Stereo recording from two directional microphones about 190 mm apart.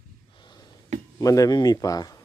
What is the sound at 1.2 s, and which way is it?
Speech, 20° left (ahead or behind).